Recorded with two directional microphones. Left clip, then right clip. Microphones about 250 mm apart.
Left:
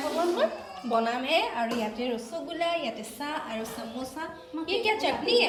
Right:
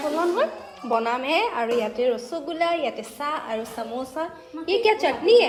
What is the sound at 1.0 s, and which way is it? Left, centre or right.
A woman's voice, right.